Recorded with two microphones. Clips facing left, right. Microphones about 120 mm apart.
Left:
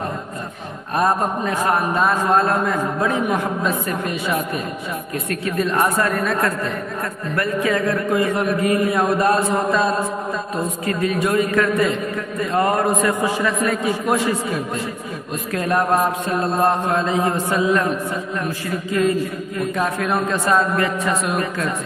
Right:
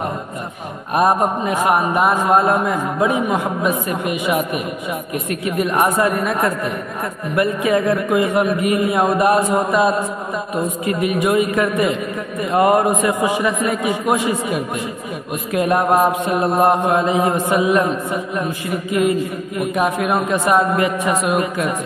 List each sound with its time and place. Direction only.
0.9 s a man's voice: 15° right (ahead or behind)